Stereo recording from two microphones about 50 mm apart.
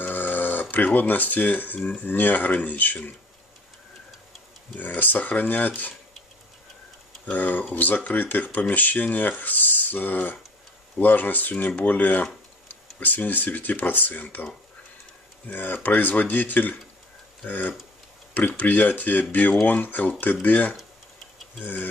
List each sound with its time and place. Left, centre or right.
0.0 s a sound: left
2.0 s speech: left
4.7 s speech: left
7.2 s speech: left